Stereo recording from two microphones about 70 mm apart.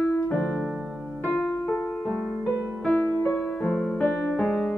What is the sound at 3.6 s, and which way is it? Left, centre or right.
Music, centre.